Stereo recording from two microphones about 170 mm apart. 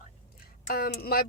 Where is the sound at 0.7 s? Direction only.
60° left (ahead or behind).